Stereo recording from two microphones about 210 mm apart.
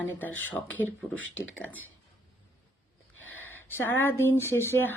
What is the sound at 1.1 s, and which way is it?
Speech, 65° left (ahead or behind).